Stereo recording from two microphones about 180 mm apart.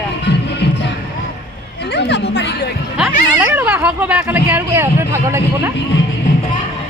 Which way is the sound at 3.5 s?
10° right (ahead or behind).